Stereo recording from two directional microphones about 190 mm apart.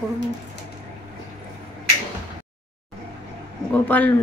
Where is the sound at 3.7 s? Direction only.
10° left (ahead or behind).